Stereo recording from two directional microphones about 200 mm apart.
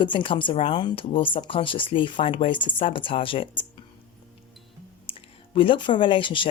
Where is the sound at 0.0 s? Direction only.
25° left (ahead or behind).